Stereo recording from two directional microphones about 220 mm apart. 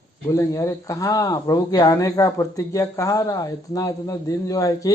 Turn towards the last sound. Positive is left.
turn(degrees=15)  # may be behind; listen again after turning